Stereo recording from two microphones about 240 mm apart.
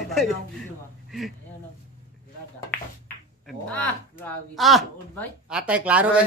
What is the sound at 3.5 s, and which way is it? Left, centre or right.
Speech, centre.